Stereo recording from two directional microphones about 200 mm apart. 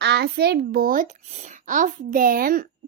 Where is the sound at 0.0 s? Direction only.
55° right (ahead or behind).